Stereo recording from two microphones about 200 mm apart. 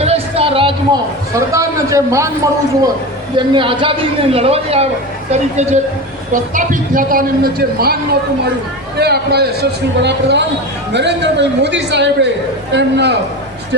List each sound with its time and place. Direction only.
0.0 s a sound: 30° right (ahead or behind)
1.4 s a man's voice: 15° right (ahead or behind)
3.3 s a woman's voice: 25° right (ahead or behind); by 7.9 s 50° right (ahead or behind)
9.0 s a man's voice: 55° right (ahead or behind)